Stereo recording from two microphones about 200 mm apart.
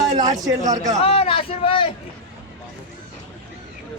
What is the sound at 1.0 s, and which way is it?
Speech, 30° left (ahead or behind).